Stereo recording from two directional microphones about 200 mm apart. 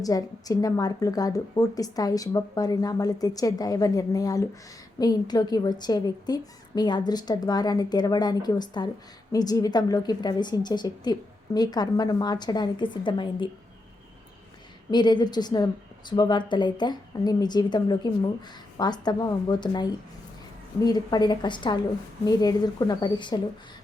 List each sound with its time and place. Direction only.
0.0 s a woman's voice: 15° left (ahead or behind)
14.8 s a woman's voice: 20° left (ahead or behind)